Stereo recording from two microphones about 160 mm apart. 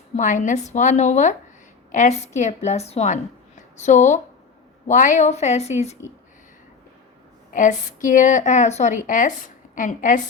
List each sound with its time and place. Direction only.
0.2 s a woman's voice: 50° left (ahead or behind)
7.5 s a woman's voice: 55° left (ahead or behind)